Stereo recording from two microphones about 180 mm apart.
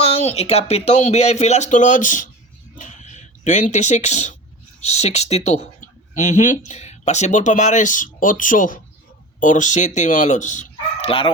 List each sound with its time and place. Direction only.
0.0 s speech: 35° left (ahead or behind)